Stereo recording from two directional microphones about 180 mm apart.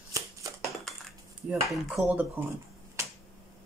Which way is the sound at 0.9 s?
Centre (ahead or behind).